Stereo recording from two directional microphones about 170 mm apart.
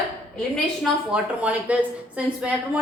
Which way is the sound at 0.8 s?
5° right (ahead or behind).